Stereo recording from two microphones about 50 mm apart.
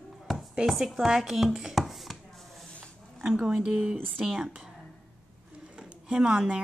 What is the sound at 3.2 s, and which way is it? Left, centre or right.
Speech, centre.